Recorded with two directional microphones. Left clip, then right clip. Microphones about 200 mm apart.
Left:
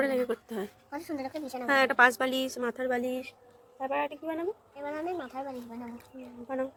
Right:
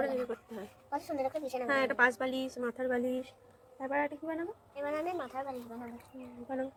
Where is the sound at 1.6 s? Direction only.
55° left (ahead or behind).